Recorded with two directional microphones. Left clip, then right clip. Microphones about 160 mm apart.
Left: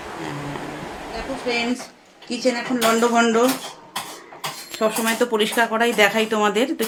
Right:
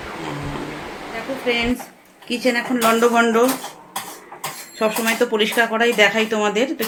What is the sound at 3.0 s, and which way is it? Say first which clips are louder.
Speech: right 2 dB; 5° right (ahead or behind).